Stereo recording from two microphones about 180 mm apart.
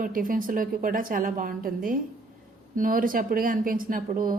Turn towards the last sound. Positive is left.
turn(degrees=-50)  # may be behind; listen again after turning